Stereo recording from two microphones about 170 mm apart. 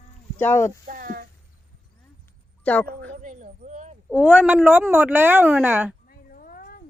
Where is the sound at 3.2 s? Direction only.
45° right (ahead or behind).